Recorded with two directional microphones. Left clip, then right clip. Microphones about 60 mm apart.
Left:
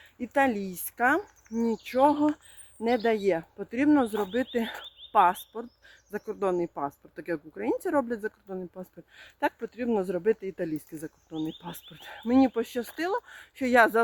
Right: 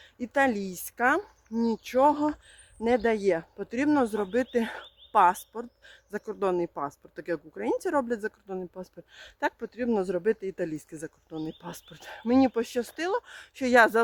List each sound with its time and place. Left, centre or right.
0.2 s speech: right
1.9 s speech: right
6.4 s speech: right